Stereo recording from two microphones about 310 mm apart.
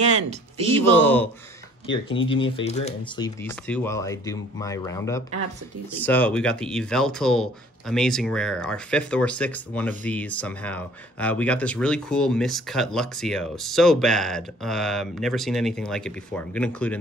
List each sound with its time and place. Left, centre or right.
0.0 s speech: right
0.9 s speech: centre
2.5 s speech: left; by 17.0 s centre